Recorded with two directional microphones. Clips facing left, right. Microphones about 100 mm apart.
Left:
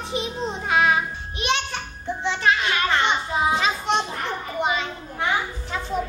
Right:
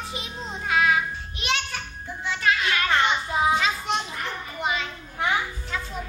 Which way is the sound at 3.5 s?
25° left (ahead or behind).